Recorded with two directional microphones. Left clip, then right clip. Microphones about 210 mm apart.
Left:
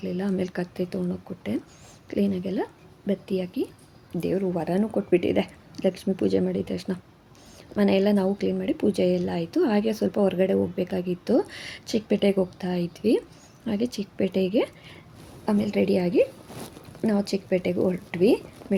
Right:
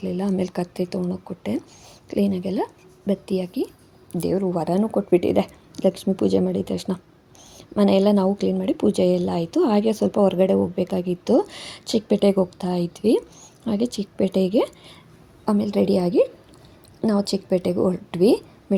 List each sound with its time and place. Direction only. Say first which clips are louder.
0.0 s a woman's voice: right 3 dB; 25° right (ahead or behind)